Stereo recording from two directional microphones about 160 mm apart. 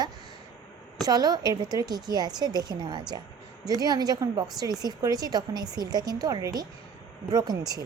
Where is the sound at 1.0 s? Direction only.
25° right (ahead or behind).